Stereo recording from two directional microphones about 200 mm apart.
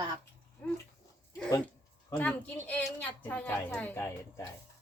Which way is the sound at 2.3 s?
10° left (ahead or behind).